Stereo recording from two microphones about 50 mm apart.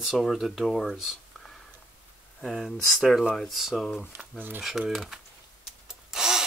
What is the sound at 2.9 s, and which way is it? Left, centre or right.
Speech, centre.